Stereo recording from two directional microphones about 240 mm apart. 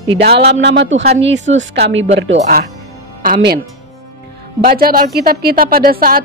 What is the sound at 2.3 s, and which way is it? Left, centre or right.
A woman's voice, right.